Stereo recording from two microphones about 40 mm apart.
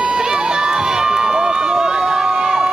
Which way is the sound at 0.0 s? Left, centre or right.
Centre.